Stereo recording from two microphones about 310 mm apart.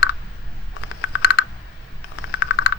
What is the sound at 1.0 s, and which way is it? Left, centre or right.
Computer keyboard, left.